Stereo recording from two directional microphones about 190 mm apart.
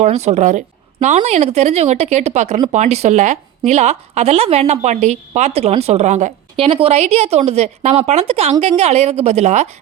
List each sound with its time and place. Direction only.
0.0 s a woman's voice: 35° right (ahead or behind)